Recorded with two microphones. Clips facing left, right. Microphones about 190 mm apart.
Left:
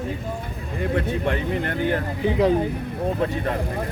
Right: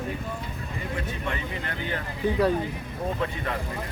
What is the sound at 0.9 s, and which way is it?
Speech, 55° left (ahead or behind).